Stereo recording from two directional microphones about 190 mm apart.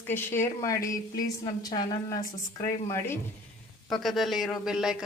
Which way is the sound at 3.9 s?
Centre (ahead or behind).